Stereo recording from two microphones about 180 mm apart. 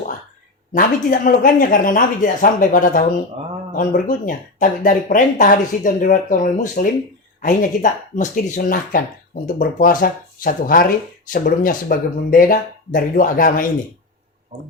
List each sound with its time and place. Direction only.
0.7 s speech: 50° left (ahead or behind)